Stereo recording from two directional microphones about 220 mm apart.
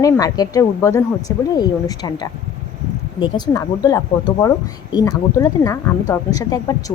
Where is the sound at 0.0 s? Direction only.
15° left (ahead or behind).